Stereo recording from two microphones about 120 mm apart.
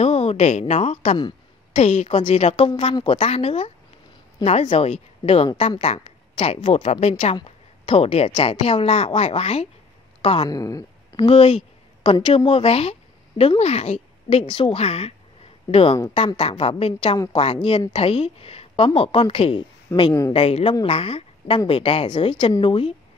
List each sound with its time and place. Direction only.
0.0 s a woman's voice: 60° left (ahead or behind)
2.1 s a woman's voice: 60° left (ahead or behind)
7.4 s a sound: 55° left (ahead or behind)
8.4 s a woman's voice: 55° left (ahead or behind)
10.5 s speech: 30° left (ahead or behind)
11.2 s a woman's voice: 55° left (ahead or behind)
19.9 s speech: 20° left (ahead or behind)
20.3 s a woman's voice: 50° left (ahead or behind)